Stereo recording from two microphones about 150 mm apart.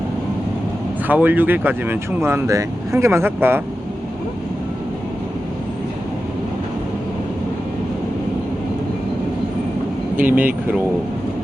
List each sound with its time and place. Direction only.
1.0 s speech: 10° right (ahead or behind)
10.2 s speech: 10° right (ahead or behind)